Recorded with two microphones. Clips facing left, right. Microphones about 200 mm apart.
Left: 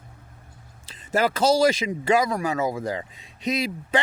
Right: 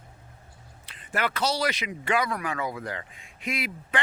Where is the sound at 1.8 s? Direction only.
30° left (ahead or behind).